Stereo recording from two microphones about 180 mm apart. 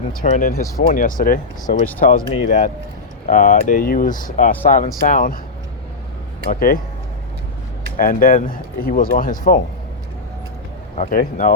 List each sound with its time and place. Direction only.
0.2 s speech: 50° left (ahead or behind)
6.5 s speech: 50° left (ahead or behind)
7.9 s speech: 50° left (ahead or behind)
10.9 s speech: 45° left (ahead or behind)